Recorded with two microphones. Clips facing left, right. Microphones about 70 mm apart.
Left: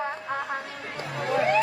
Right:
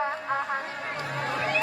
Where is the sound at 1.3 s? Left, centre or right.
Left.